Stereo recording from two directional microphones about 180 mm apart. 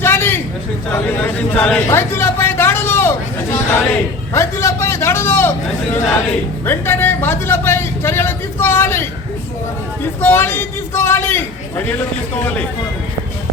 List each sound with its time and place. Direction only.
0.0 s a sound: 15° left (ahead or behind)
4.4 s vehicle: 15° left (ahead or behind)
6.7 s a man's voice: 10° left (ahead or behind)